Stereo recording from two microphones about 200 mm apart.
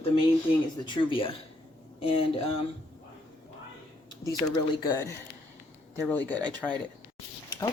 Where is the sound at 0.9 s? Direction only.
25° left (ahead or behind).